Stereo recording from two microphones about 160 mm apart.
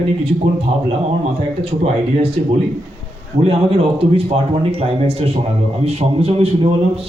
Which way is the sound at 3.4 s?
35° right (ahead or behind).